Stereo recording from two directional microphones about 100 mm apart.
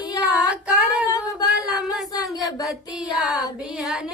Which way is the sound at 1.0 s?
35° left (ahead or behind).